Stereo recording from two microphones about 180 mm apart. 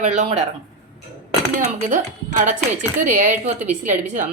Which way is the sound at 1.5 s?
45° right (ahead or behind).